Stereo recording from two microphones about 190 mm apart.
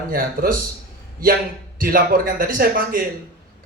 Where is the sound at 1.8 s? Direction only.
50° right (ahead or behind).